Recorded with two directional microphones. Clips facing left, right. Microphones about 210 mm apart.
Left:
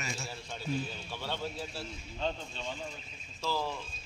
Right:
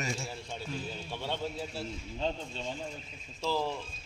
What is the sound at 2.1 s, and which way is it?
A man's voice, 30° right (ahead or behind).